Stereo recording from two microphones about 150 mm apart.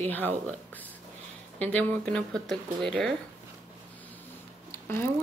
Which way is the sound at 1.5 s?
10° left (ahead or behind).